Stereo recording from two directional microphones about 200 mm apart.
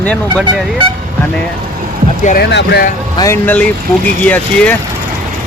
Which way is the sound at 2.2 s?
55° left (ahead or behind).